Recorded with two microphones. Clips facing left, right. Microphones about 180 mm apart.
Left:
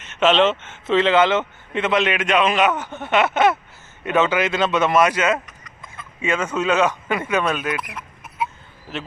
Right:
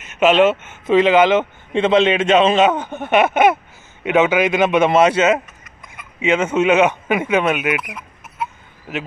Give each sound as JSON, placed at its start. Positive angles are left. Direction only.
{"t": 0.0, "sound": "speech", "side_deg": -10}
{"t": 1.7, "sound": "a man's voice", "side_deg": -25}